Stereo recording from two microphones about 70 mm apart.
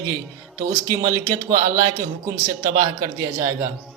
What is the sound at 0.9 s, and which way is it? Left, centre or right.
A man's voice, right.